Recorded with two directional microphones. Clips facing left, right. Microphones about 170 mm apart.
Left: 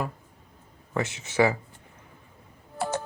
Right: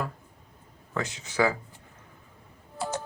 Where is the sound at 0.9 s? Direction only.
25° left (ahead or behind).